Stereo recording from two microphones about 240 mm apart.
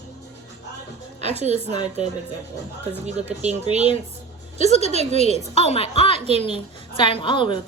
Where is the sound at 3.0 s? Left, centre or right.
Right.